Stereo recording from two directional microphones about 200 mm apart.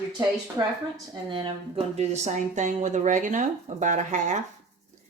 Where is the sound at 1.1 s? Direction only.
25° right (ahead or behind).